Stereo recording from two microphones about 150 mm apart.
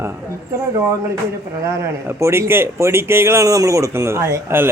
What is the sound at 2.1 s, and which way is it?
Speech, 15° right (ahead or behind).